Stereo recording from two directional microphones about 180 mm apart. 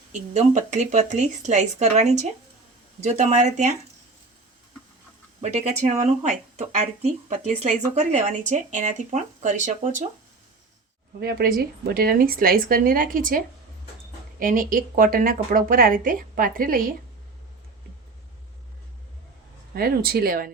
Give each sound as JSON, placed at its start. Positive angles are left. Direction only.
{"t": 0.1, "sound": "speech", "side_deg": -40}
{"t": 5.4, "sound": "speech", "side_deg": -40}
{"t": 11.2, "sound": "speech", "side_deg": -60}
{"t": 19.7, "sound": "speech", "side_deg": -55}